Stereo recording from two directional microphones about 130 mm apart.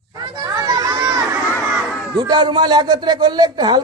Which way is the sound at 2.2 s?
35° right (ahead or behind).